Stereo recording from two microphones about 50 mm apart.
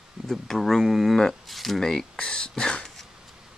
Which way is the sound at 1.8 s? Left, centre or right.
Centre.